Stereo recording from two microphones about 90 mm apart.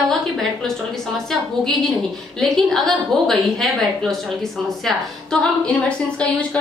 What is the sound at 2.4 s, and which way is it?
A woman's voice, 5° left (ahead or behind).